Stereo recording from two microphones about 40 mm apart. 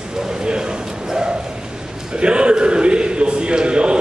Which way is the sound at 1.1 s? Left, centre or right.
Centre.